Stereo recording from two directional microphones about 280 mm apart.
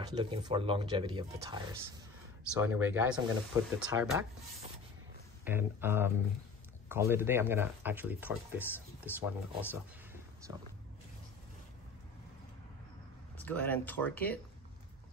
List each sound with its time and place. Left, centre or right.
0.0 s speech: centre
5.4 s speech: centre
13.4 s speech: centre